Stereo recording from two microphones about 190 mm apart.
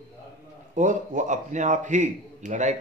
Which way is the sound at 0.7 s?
40° right (ahead or behind).